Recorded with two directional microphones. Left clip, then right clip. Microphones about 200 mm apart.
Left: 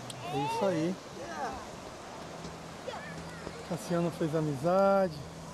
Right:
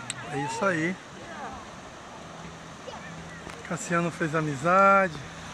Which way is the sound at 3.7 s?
15° right (ahead or behind).